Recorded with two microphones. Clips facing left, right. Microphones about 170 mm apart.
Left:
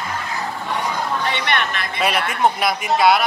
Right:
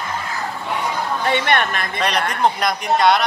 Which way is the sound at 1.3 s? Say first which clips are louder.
Right 4 dB; 50° right (ahead or behind).